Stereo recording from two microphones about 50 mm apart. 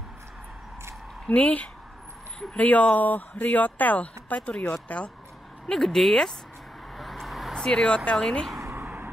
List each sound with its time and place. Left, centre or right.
1.2 s speech: left
5.7 s speech: centre
7.0 s vehicle: centre
7.6 s speech: centre
8.7 s vehicle: right